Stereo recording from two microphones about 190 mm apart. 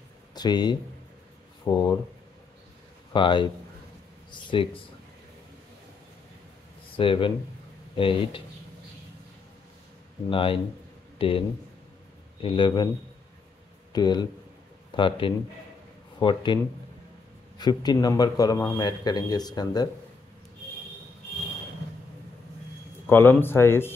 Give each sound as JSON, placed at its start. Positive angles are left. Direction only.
{"t": 0.3, "sound": "speech", "side_deg": 20}
{"t": 3.1, "sound": "speech", "side_deg": 25}
{"t": 7.0, "sound": "speech", "side_deg": 25}
{"t": 10.3, "sound": "speech", "side_deg": 30}
{"t": 13.9, "sound": "speech", "side_deg": 20}
{"t": 17.6, "sound": "speech", "side_deg": 20}
{"t": 23.0, "sound": "speech", "side_deg": 10}